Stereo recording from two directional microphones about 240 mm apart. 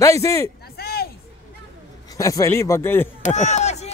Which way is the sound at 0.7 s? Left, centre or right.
Left.